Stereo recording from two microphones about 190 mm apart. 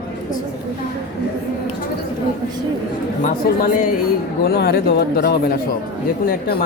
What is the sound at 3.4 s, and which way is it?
Speech, 50° left (ahead or behind).